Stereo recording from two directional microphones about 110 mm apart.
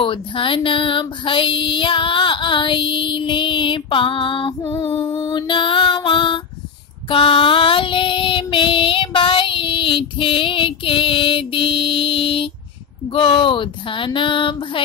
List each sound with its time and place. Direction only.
0.0 s female singing: 50° left (ahead or behind)
4.6 s female singing: 25° left (ahead or behind)
5.0 s music: 25° left (ahead or behind)
5.3 s music: 50° left (ahead or behind)
7.1 s child singing: 55° left (ahead or behind)
13.1 s female singing: 50° left (ahead or behind)